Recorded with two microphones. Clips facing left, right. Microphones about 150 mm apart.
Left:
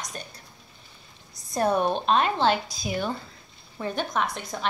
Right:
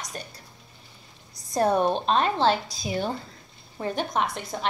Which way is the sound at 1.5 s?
40° right (ahead or behind).